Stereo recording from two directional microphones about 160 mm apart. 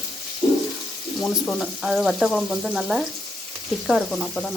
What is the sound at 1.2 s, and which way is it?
Frying, 5° left (ahead or behind).